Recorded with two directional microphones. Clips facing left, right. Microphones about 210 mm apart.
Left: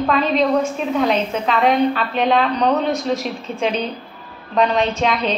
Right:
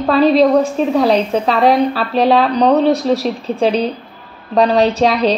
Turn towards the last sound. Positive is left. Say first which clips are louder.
# right 6 dB
turn(degrees=-35)  # may be behind; listen again after turning